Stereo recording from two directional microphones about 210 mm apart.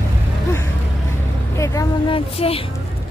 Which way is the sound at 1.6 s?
15° left (ahead or behind).